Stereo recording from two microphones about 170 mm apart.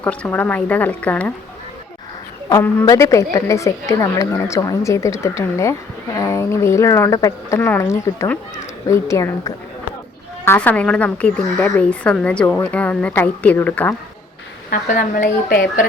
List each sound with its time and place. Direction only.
0.0 s a woman's voice: 10° left (ahead or behind)
2.5 s a woman's voice: 15° left (ahead or behind)
14.7 s a woman's voice: 55° left (ahead or behind)
15.2 s speech: 70° left (ahead or behind)